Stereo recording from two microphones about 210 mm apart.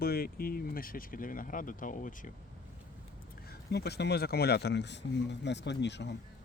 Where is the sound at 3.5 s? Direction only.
50° left (ahead or behind).